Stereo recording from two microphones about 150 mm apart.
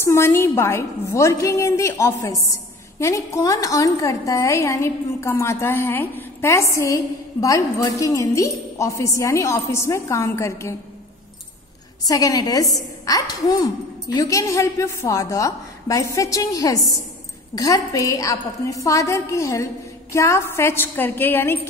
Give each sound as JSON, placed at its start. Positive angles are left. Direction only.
{"t": 0.0, "sound": "a woman's voice", "side_deg": 15}
{"t": 12.0, "sound": "a woman's voice", "side_deg": 25}